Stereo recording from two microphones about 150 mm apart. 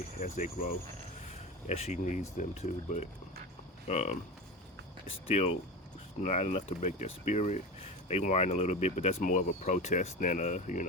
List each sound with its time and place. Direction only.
0.2 s speech: 55° left (ahead or behind)
1.3 s speech: 45° left (ahead or behind)